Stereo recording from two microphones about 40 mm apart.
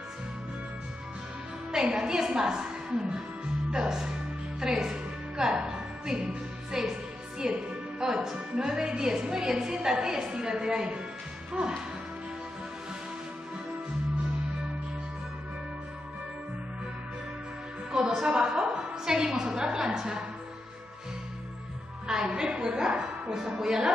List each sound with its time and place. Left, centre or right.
1.7 s a woman's voice: centre
4.6 s music: centre
7.6 s a woman's voice: right
18.2 s a sound: right
22.0 s a woman's voice: centre